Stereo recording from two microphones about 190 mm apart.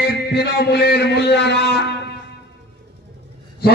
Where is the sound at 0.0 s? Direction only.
60° left (ahead or behind).